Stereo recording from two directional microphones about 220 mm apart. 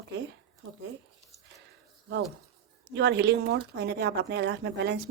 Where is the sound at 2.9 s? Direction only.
55° right (ahead or behind).